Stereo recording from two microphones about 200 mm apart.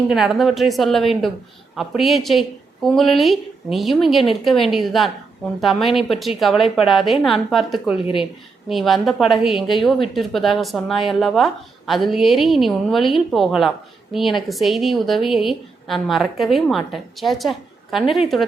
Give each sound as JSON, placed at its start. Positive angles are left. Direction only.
{"t": 0.1, "sound": "a woman's voice", "side_deg": 0}
{"t": 8.0, "sound": "speech", "side_deg": 25}
{"t": 8.7, "sound": "a woman's voice", "side_deg": 0}